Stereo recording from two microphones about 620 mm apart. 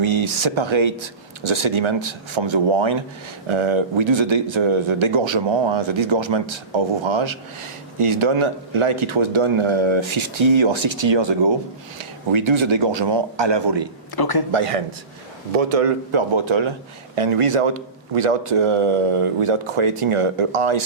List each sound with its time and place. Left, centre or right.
0.0 s speech: right
14.2 s speech: left
14.5 s a man's voice: right